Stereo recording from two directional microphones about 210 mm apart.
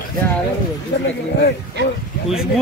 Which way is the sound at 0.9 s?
55° left (ahead or behind).